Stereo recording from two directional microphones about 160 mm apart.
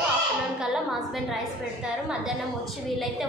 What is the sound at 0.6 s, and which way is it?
A woman's voice, centre (ahead or behind).